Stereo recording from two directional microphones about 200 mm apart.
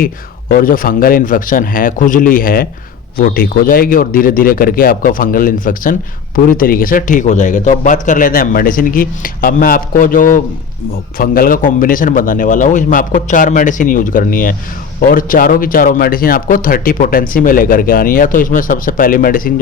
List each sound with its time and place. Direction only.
0.0 s a man's voice: 45° left (ahead or behind)